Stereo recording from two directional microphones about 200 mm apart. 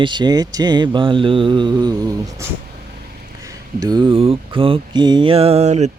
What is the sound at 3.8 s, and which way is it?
Speech, 20° right (ahead or behind).